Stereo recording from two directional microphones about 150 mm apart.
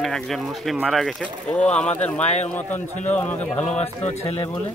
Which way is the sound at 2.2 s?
50° left (ahead or behind).